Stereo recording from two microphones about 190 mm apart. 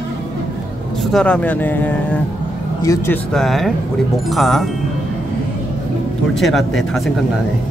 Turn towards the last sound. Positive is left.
turn(degrees=0)  # may be behind; listen again after turning